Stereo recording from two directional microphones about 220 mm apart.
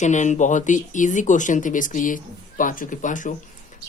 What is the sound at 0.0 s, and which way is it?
Speech, 35° left (ahead or behind).